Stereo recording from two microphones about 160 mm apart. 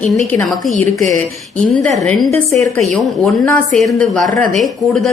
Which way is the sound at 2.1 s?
5° left (ahead or behind).